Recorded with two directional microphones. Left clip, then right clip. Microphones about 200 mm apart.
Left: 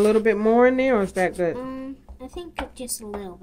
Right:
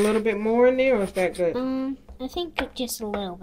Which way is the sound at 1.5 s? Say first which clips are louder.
Right 5 dB; 40° right (ahead or behind).